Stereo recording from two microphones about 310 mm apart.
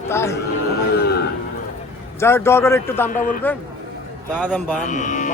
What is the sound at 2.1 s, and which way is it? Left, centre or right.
A man's voice, centre.